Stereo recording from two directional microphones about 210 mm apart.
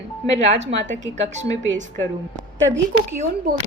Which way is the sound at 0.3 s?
35° right (ahead or behind).